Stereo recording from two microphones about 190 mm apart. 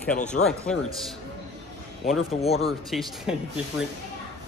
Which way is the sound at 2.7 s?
Centre (ahead or behind).